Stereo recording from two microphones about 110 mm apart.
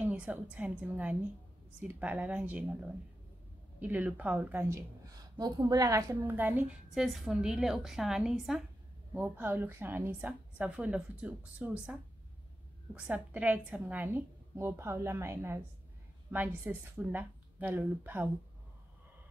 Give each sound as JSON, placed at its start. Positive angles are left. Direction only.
{"t": 0.0, "sound": "a woman's voice", "side_deg": -15}
{"t": 6.2, "sound": "a woman's voice", "side_deg": -15}
{"t": 6.9, "sound": "a woman's voice", "side_deg": 0}
{"t": 9.1, "sound": "a woman's voice", "side_deg": -15}